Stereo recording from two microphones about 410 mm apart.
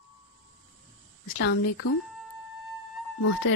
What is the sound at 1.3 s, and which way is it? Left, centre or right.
Speech, left.